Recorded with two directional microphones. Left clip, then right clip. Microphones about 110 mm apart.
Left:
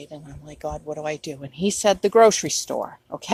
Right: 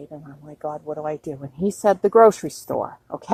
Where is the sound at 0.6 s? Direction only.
15° left (ahead or behind).